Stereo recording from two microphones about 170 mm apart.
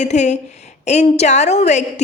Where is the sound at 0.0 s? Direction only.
45° left (ahead or behind).